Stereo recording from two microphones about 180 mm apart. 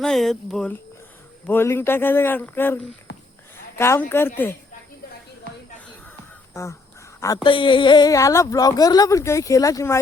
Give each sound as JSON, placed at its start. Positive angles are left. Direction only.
{"t": 0.0, "sound": "speech", "side_deg": 0}
{"t": 3.1, "sound": "a sound", "side_deg": 65}
{"t": 3.8, "sound": "speech", "side_deg": 15}
{"t": 6.5, "sound": "speech", "side_deg": 15}
{"t": 7.4, "sound": "speech", "side_deg": 25}